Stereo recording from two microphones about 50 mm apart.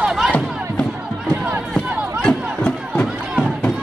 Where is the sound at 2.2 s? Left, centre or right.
Centre.